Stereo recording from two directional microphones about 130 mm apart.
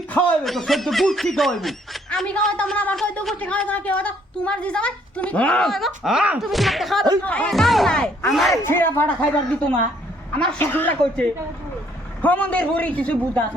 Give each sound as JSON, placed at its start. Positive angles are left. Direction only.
{"t": 0.1, "sound": "a man's voice", "side_deg": 10}
{"t": 0.4, "sound": "speech", "side_deg": 0}
{"t": 8.6, "sound": "a man's voice", "side_deg": 15}
{"t": 10.3, "sound": "a man's voice", "side_deg": 10}